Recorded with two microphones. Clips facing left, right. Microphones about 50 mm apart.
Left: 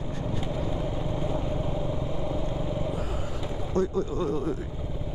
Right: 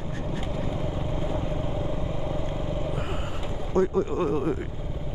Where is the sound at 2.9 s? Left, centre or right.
Right.